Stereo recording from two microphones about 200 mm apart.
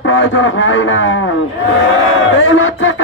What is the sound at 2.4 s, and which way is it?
Speech, 75° left (ahead or behind).